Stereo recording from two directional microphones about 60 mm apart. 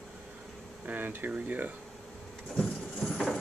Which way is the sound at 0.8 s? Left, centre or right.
Right.